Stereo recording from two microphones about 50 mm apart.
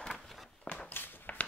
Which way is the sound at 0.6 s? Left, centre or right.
Left.